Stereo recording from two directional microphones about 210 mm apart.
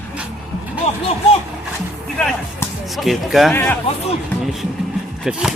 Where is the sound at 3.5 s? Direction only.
10° left (ahead or behind).